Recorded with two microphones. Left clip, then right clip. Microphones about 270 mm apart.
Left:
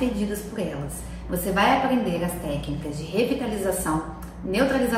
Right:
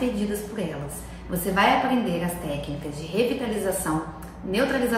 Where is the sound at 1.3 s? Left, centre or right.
Centre.